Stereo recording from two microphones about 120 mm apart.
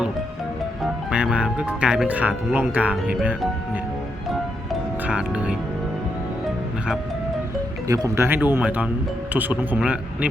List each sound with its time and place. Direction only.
1.1 s speech: 10° right (ahead or behind)
5.0 s speech: 10° right (ahead or behind)
7.9 s speech: 25° right (ahead or behind); by 10.2 s 10° right (ahead or behind)